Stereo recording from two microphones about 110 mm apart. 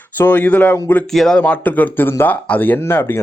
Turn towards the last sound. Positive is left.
turn(degrees=20)  # may be behind; listen again after turning